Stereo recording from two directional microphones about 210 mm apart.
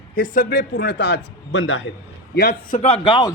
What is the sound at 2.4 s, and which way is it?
Speech, 35° left (ahead or behind).